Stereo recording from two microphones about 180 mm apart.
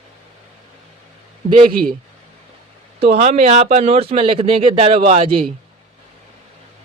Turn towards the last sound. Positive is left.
turn(degrees=-30)  # may be behind; listen again after turning